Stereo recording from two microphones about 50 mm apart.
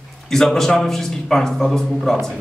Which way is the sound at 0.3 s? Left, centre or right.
Centre.